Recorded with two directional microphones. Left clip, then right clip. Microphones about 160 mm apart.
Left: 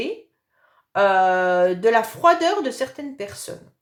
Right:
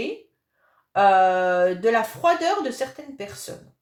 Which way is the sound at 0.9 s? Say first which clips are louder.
Even; 35° left (ahead or behind).